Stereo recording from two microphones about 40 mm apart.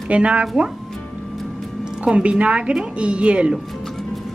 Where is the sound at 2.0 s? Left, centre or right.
Right.